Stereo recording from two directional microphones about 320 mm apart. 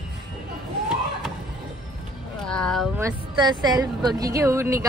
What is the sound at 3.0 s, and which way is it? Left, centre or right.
A woman's voice, centre.